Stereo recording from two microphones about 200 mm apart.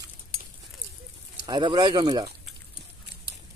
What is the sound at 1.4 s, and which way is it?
Speech, 20° right (ahead or behind).